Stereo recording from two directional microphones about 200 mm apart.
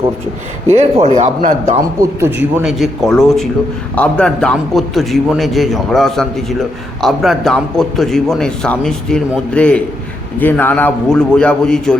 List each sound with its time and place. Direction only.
0.8 s speech: 30° right (ahead or behind)
1.8 s a man's voice: 15° right (ahead or behind); by 11.9 s 5° left (ahead or behind)